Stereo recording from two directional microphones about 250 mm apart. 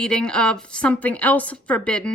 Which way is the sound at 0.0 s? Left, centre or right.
Centre.